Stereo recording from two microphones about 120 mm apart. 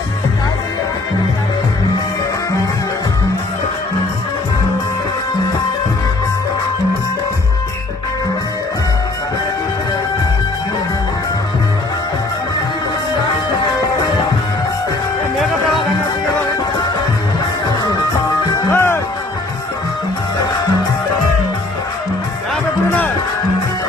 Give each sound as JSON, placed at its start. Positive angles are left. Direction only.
{"t": 17.9, "sound": "music", "side_deg": 30}
{"t": 18.7, "sound": "music", "side_deg": 20}
{"t": 22.9, "sound": "music", "side_deg": 15}